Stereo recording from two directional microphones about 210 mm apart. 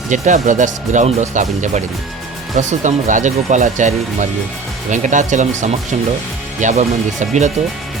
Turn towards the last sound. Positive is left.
turn(degrees=-35)  # may be behind; listen again after turning